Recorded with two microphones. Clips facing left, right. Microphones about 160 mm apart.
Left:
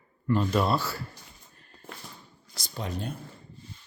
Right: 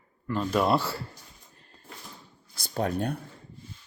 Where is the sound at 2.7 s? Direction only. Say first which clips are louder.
Right 6 dB; 55° right (ahead or behind).